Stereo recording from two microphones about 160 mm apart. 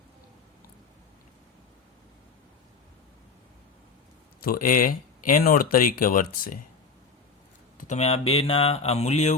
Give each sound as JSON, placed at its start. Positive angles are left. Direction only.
{"t": 4.4, "sound": "speech", "side_deg": 65}
{"t": 7.8, "sound": "speech", "side_deg": 45}